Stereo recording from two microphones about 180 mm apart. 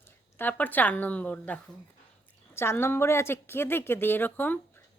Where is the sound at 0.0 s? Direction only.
10° left (ahead or behind).